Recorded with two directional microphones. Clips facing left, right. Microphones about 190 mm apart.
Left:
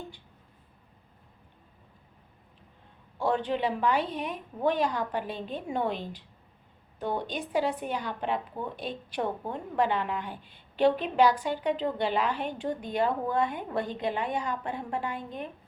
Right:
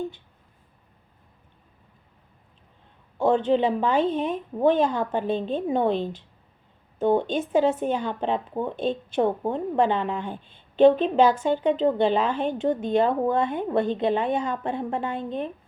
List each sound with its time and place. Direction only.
3.2 s a woman's voice: 25° right (ahead or behind)